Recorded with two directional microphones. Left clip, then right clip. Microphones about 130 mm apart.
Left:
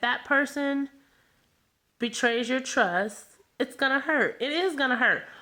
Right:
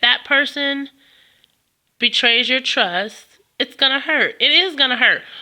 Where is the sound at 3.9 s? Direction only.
20° right (ahead or behind).